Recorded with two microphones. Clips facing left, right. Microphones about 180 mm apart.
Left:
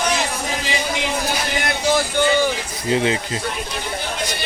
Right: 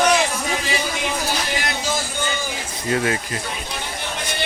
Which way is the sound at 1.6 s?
65° left (ahead or behind).